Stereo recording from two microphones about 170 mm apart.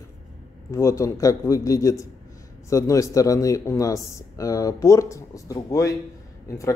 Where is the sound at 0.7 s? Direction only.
15° left (ahead or behind).